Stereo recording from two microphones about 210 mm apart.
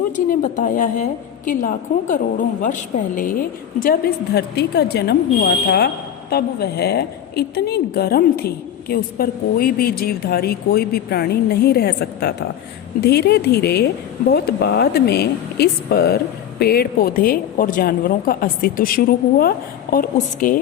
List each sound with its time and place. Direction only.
0.3 s a woman's voice: 40° left (ahead or behind)